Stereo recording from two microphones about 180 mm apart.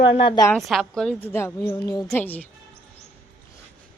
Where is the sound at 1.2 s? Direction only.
15° left (ahead or behind).